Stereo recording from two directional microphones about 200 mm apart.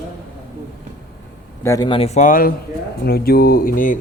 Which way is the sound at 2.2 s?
45° left (ahead or behind).